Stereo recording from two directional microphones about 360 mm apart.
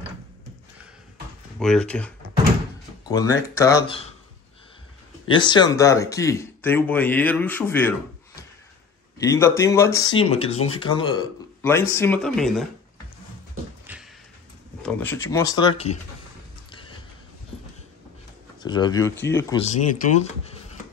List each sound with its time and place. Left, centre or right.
1.6 s speech: centre
5.2 s speech: centre
9.2 s speech: centre
13.9 s a sound: centre
14.8 s speech: centre
18.6 s speech: centre
20.0 s speech: centre